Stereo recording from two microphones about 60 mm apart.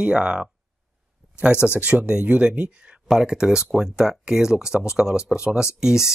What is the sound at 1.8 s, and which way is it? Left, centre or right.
Speech, centre.